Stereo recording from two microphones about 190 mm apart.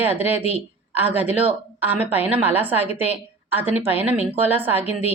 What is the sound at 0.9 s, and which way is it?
A woman's voice, 10° right (ahead or behind).